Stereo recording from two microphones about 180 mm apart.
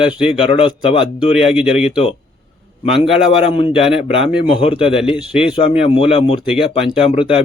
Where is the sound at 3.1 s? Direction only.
30° left (ahead or behind).